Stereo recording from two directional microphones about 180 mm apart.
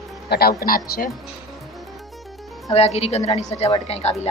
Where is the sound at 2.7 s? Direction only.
35° left (ahead or behind).